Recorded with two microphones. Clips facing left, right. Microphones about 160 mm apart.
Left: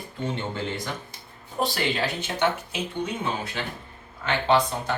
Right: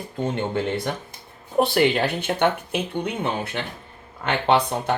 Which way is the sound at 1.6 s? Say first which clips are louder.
Right 6 dB; 60° right (ahead or behind).